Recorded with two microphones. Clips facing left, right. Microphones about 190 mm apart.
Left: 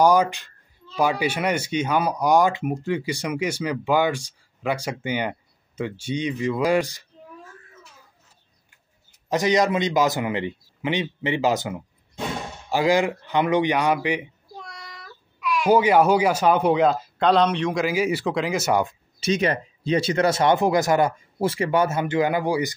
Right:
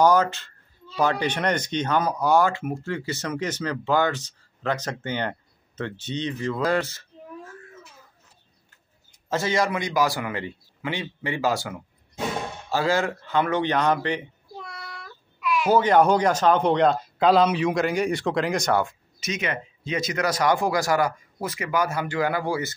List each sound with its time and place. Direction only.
0.0 s a child's voice: 10° left (ahead or behind)
9.3 s speech: 15° left (ahead or behind)
14.6 s child singing: centre (ahead or behind)
15.7 s speech: 10° left (ahead or behind)
18.7 s speech: 15° left (ahead or behind)
19.1 s speech: 30° left (ahead or behind); by 22.8 s 15° left (ahead or behind)